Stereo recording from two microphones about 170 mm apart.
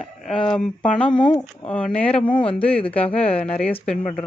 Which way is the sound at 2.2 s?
30° left (ahead or behind).